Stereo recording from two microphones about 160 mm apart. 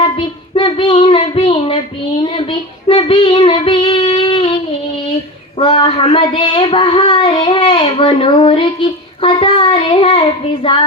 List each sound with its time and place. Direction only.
0.2 s child singing: 30° left (ahead or behind)